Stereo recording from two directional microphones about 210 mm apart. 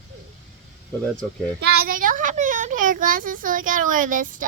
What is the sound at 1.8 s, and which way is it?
A child's voice, 40° right (ahead or behind).